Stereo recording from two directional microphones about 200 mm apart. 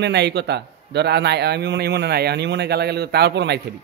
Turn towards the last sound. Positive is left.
turn(degrees=-60)  # may be behind; listen again after turning